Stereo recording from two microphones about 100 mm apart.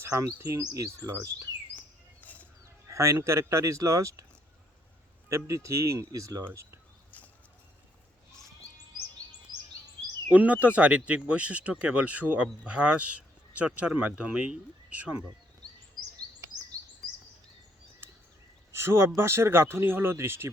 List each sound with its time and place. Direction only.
0.0 s speech: 25° right (ahead or behind)
2.2 s a sound: 15° left (ahead or behind)
2.9 s speech: 30° right (ahead or behind)
5.3 s speech: 30° right (ahead or behind)
10.2 s speech: 15° right (ahead or behind)
18.7 s speech: 25° right (ahead or behind)